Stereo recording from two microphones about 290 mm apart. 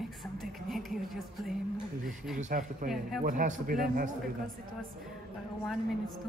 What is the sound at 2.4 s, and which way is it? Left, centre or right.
Speech, right.